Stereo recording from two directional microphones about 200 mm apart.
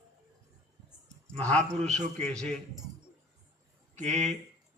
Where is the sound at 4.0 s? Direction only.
35° right (ahead or behind).